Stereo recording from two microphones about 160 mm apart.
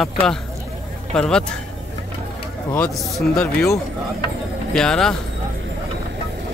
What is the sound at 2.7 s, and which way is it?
Speech, 5° left (ahead or behind).